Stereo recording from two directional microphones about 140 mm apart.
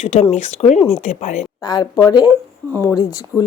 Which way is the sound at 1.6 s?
30° left (ahead or behind).